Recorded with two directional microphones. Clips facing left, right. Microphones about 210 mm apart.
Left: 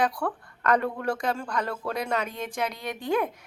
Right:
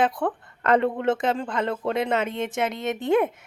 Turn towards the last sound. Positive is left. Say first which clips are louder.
# right 5 dB
turn(degrees=-25)  # may be behind; listen again after turning